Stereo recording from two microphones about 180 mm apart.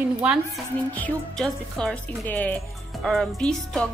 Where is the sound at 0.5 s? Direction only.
5° left (ahead or behind).